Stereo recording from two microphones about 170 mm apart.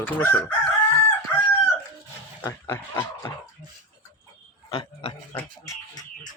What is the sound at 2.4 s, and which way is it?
Speech, 15° left (ahead or behind).